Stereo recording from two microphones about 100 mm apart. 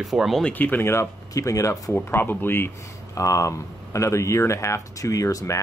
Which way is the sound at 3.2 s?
35° left (ahead or behind).